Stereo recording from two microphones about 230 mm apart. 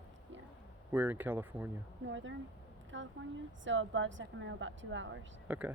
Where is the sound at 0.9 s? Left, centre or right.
Centre.